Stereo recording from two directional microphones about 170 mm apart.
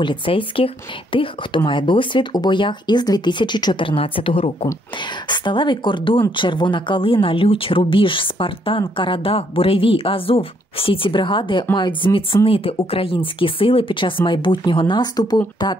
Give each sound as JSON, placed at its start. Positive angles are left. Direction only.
{"t": 0.0, "sound": "speech", "side_deg": 30}